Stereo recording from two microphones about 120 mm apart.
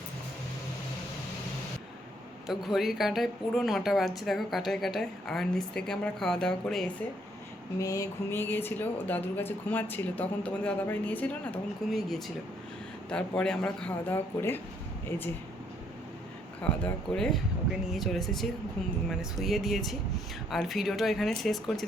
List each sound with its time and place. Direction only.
2.5 s a woman's voice: centre (ahead or behind)
7.8 s speech: 25° left (ahead or behind)
11.9 s a woman's voice: centre (ahead or behind)
16.8 s a woman's voice: 10° left (ahead or behind)